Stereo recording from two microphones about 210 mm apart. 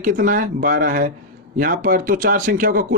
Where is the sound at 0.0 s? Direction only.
40° right (ahead or behind).